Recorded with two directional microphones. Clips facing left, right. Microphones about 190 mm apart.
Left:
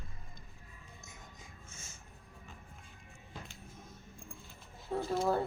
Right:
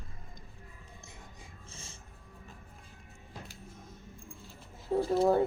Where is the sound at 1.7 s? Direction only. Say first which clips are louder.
Right 4 dB; 30° right (ahead or behind).